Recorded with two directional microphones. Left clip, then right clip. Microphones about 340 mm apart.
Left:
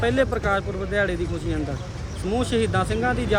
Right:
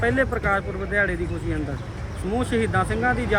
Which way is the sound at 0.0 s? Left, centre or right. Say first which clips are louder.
Even; centre.